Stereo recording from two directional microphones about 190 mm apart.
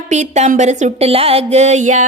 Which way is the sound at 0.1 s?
40° right (ahead or behind).